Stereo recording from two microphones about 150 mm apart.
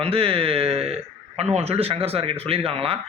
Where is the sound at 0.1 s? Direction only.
40° right (ahead or behind).